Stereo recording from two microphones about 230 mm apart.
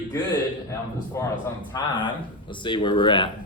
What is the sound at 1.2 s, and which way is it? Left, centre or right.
A man's voice, centre.